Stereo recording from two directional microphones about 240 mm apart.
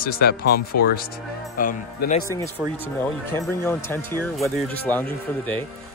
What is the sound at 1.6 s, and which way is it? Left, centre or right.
Speech, left.